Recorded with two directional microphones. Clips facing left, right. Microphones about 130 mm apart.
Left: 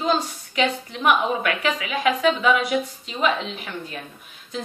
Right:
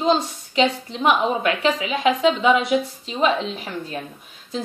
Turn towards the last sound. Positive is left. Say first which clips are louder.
# right 2 dB
turn(degrees=-30)  # may be behind; listen again after turning